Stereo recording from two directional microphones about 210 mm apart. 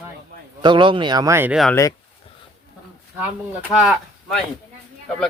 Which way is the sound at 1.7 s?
15° left (ahead or behind).